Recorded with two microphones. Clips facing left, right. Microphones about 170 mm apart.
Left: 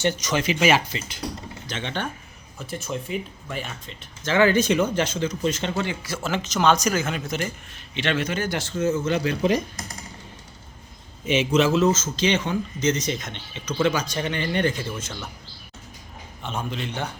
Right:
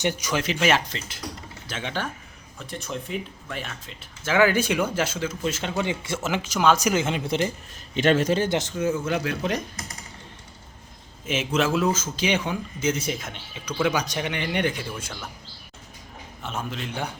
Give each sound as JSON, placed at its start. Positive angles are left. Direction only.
{"t": 0.0, "sound": "a man's voice", "side_deg": -10}
{"t": 0.4, "sound": "speech", "side_deg": 5}
{"t": 5.7, "sound": "speech", "side_deg": -20}
{"t": 6.2, "sound": "a man's voice", "side_deg": -10}
{"t": 6.8, "sound": "speech", "side_deg": -20}
{"t": 7.9, "sound": "speech", "side_deg": -45}
{"t": 8.9, "sound": "speech", "side_deg": 0}
{"t": 11.3, "sound": "a man's voice", "side_deg": 0}
{"t": 16.4, "sound": "speech", "side_deg": 0}